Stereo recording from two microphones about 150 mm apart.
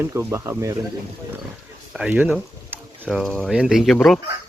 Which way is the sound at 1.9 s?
10° right (ahead or behind).